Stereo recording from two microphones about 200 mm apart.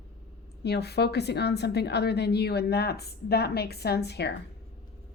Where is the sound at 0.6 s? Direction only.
55° left (ahead or behind).